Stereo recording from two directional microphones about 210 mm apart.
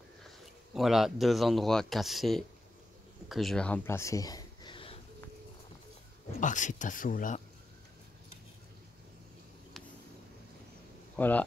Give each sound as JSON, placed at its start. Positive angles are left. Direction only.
{"t": 0.7, "sound": "speech", "side_deg": 0}
{"t": 6.4, "sound": "speech", "side_deg": 35}
{"t": 11.1, "sound": "speech", "side_deg": 10}